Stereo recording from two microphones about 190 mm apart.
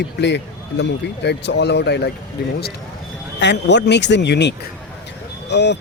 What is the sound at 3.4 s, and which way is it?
Speech, 65° left (ahead or behind).